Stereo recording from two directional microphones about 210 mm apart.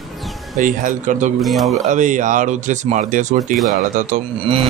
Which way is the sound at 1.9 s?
35° right (ahead or behind).